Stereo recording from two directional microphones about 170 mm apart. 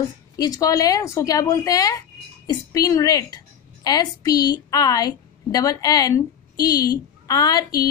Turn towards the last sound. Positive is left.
turn(degrees=20)  # may be behind; listen again after turning